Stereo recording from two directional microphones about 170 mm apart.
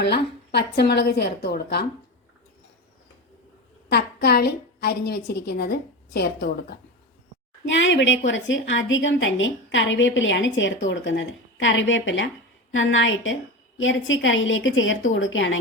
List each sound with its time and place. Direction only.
0.0 s a woman's voice: 75° left (ahead or behind)
3.8 s a woman's voice: 70° left (ahead or behind)
7.6 s a woman's voice: 90° left